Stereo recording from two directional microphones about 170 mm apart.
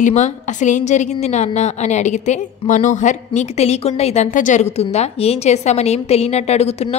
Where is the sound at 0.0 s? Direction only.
45° left (ahead or behind).